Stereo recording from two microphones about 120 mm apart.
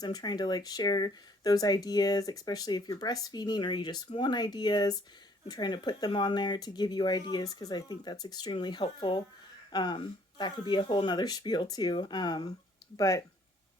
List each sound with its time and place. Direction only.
0.0 s speech: 35° left (ahead or behind)